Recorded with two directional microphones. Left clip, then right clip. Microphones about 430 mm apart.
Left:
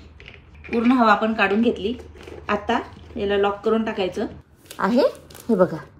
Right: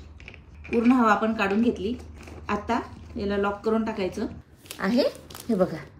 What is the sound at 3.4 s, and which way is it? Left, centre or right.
Speech, left.